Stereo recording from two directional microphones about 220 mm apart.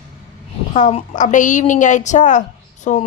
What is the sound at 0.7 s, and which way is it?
Speech, 30° left (ahead or behind).